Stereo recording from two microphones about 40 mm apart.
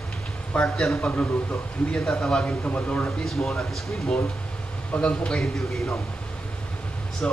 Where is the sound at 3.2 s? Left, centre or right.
Centre.